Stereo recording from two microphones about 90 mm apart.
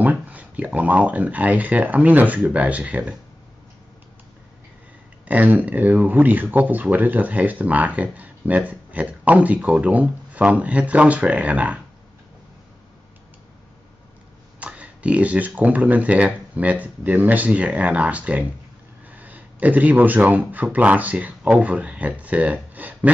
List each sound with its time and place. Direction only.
0.0 s speech: 15° right (ahead or behind)
5.3 s speech: 20° right (ahead or behind)
14.6 s speech: 15° right (ahead or behind)